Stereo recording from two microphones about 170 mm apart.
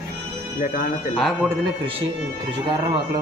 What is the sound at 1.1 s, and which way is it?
Speech, centre (ahead or behind).